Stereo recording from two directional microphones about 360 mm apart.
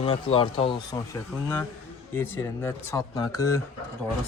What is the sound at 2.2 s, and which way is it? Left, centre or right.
Speech, centre.